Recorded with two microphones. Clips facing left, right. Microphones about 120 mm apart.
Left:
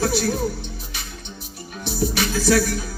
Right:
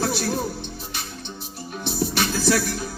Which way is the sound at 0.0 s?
25° right (ahead or behind).